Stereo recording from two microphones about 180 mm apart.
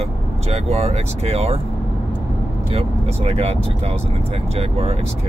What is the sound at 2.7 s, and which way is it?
Speech, 35° right (ahead or behind).